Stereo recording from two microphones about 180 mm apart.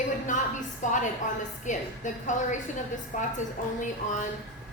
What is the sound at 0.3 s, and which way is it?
A woman's voice, 45° left (ahead or behind).